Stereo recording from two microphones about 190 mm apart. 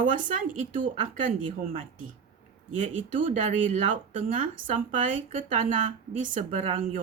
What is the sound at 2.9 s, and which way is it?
Speech, 40° right (ahead or behind).